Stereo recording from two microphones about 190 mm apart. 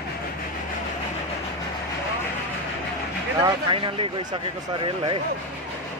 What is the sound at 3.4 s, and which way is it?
Speech, 25° right (ahead or behind).